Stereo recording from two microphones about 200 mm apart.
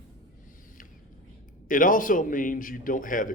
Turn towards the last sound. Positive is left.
turn(degrees=40)  # may be behind; listen again after turning